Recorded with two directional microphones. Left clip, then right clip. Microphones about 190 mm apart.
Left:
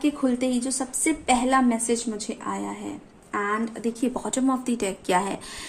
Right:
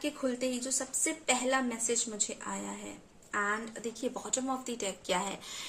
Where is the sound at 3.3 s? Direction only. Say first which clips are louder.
Left 6 dB; 35° left (ahead or behind).